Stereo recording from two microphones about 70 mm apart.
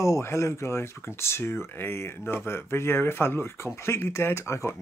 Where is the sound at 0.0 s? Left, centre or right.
Left.